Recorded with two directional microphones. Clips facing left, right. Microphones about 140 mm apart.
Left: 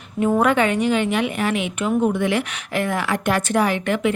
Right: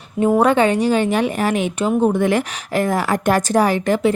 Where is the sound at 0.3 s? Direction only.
30° right (ahead or behind).